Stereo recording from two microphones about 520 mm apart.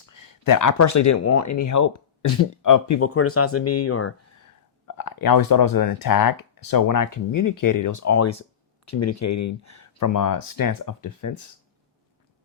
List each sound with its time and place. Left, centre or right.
0.1 s speech: left
4.9 s speech: left